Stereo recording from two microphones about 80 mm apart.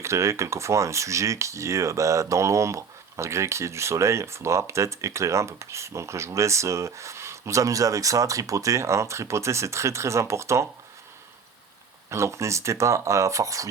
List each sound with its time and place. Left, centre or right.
0.0 s speech: right
12.1 s speech: right